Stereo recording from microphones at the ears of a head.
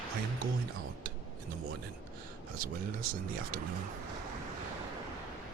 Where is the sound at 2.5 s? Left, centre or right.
Right.